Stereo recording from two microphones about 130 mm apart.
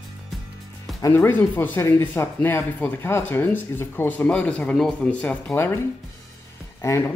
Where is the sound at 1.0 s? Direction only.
20° left (ahead or behind).